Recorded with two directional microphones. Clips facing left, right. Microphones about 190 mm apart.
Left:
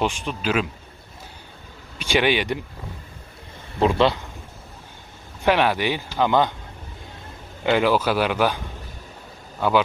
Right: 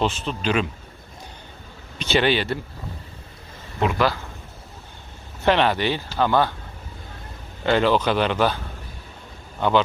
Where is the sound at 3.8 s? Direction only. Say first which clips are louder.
Left 3 dB; 30° left (ahead or behind).